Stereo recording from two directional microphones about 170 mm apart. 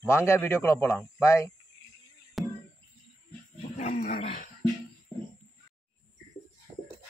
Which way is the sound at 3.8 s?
45° left (ahead or behind).